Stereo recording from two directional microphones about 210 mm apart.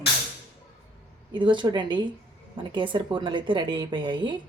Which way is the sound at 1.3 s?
20° right (ahead or behind).